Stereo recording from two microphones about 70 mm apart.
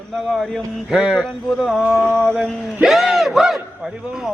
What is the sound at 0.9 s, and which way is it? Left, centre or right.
Speech, centre.